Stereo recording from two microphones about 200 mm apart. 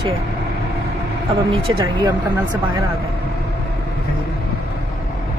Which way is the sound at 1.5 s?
25° right (ahead or behind).